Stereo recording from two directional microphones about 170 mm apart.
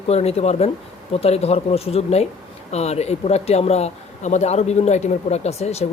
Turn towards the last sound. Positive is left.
turn(degrees=40)  # may be behind; listen again after turning